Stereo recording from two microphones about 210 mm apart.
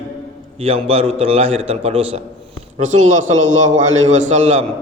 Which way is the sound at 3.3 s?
65° right (ahead or behind).